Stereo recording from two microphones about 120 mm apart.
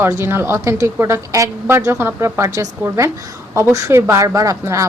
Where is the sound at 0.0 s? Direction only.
20° right (ahead or behind).